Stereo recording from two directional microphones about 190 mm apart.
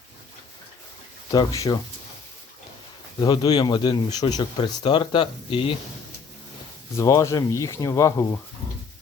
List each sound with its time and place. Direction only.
1.3 s speech: 20° left (ahead or behind)
3.2 s speech: 20° left (ahead or behind)
6.9 s speech: 15° left (ahead or behind)